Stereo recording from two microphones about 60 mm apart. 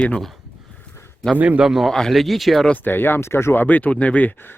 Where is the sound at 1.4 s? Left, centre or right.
Right.